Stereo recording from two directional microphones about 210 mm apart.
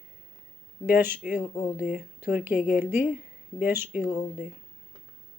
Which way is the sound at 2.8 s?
10° right (ahead or behind).